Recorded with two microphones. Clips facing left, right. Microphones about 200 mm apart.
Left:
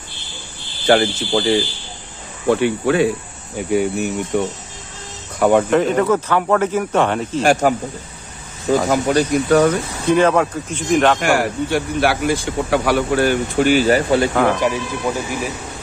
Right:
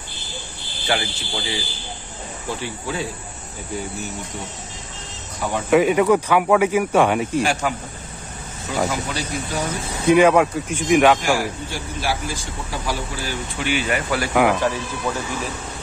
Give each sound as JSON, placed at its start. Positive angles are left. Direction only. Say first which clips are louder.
{"t": 0.8, "sound": "speech", "louder": "left 10 dB", "side_deg": 50}
{"t": 2.4, "sound": "speech", "louder": "left 13 dB", "side_deg": 65}
{"t": 5.7, "sound": "speech", "louder": "even", "side_deg": -10}
{"t": 8.6, "sound": "speech", "louder": "left 8 dB", "side_deg": 50}
{"t": 10.0, "sound": "speech", "louder": "right 1 dB", "side_deg": -10}
{"t": 11.1, "sound": "speech", "louder": "left 5 dB", "side_deg": 65}
{"t": 13.7, "sound": "speech", "louder": "left 7 dB", "side_deg": 40}
{"t": 14.3, "sound": "speech", "louder": "left 1 dB", "side_deg": -10}
{"t": 14.6, "sound": "speech", "louder": "left 3 dB", "side_deg": 15}